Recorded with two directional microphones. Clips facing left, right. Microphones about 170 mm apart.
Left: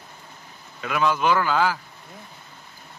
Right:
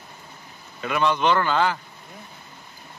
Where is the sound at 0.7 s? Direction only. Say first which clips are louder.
Even; centre (ahead or behind).